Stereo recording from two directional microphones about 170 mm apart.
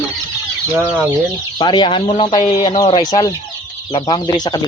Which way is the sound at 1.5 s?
25° left (ahead or behind).